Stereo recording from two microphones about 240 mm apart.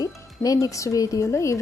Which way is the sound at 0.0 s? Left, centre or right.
Centre.